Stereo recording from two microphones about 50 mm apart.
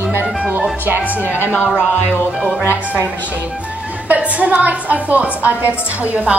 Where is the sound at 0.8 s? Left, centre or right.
Right.